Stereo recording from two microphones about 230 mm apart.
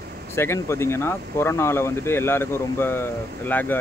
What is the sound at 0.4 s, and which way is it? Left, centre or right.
Speech, centre.